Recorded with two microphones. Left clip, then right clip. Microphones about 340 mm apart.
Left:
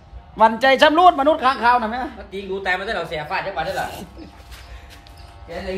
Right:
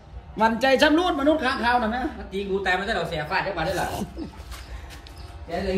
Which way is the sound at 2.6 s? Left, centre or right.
Left.